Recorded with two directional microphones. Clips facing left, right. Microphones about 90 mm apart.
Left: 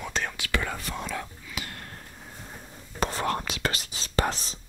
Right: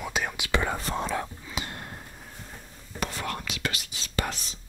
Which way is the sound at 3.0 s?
35° left (ahead or behind).